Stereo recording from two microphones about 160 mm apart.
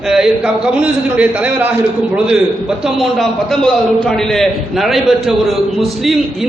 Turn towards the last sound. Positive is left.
turn(degrees=0)  # may be behind; listen again after turning